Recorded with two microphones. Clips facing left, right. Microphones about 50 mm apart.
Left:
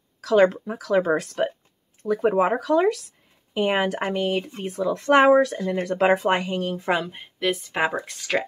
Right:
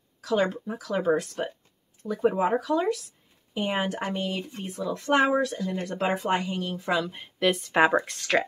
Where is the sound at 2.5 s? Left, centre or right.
Left.